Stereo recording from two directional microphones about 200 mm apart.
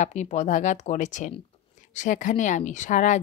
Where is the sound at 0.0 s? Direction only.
35° left (ahead or behind).